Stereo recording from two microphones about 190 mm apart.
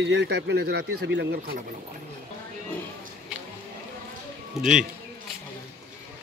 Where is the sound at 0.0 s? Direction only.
70° right (ahead or behind).